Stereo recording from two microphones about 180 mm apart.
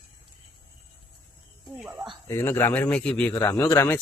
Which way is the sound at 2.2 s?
15° left (ahead or behind).